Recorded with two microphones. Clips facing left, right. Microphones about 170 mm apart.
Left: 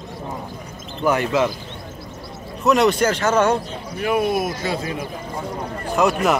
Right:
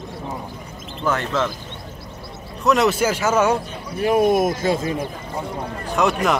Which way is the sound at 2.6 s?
Centre (ahead or behind).